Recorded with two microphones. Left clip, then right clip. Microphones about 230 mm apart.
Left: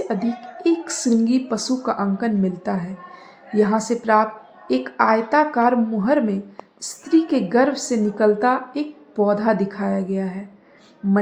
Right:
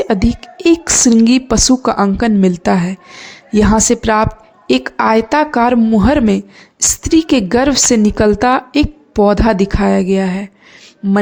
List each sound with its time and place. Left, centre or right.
0.1 s a woman's voice: right